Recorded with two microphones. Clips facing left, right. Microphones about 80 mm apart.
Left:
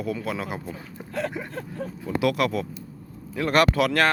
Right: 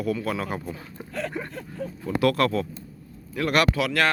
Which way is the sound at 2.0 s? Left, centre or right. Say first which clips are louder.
Right 2 dB; centre.